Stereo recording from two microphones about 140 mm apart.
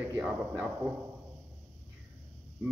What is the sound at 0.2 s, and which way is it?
Speech, 10° right (ahead or behind).